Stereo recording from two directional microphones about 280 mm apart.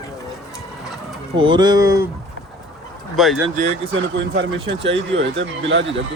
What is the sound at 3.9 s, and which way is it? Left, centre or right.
Speech, right.